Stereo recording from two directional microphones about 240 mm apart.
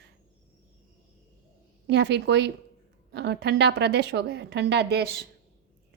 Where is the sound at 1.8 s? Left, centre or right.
Right.